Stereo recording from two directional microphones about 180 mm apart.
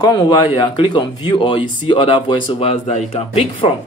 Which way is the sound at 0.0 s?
25° left (ahead or behind).